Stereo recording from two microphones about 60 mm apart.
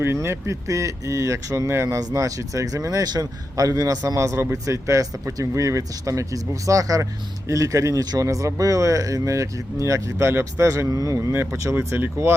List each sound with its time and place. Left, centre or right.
0.0 s speech: right
2.0 s speech: right
11.7 s speech: right